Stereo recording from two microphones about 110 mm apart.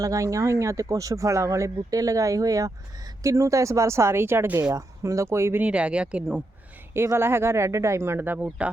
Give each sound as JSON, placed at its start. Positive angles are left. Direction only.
{"t": 0.0, "sound": "speech", "side_deg": -30}
{"t": 5.6, "sound": "speech", "side_deg": -10}
{"t": 6.9, "sound": "speech", "side_deg": -25}